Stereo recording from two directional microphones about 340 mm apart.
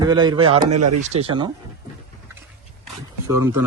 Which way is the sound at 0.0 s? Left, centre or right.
Centre.